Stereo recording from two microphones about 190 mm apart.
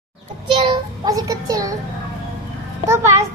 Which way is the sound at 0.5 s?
25° right (ahead or behind).